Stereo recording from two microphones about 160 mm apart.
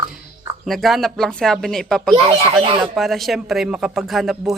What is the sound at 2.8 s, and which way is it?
Speech, centre (ahead or behind).